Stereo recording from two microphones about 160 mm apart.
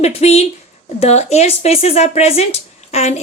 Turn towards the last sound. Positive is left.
turn(degrees=45)  # may be behind; listen again after turning